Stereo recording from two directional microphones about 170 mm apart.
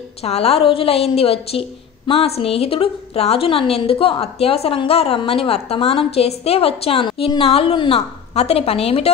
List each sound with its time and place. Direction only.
0.2 s a woman's voice: 35° left (ahead or behind)